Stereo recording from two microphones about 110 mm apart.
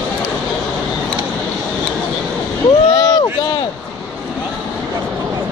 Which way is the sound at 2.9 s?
35° left (ahead or behind).